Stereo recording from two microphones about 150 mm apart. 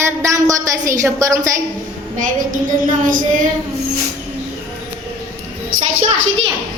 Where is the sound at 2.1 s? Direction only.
60° right (ahead or behind).